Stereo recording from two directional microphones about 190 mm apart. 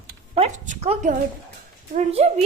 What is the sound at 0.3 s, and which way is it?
A woman's voice, 40° right (ahead or behind).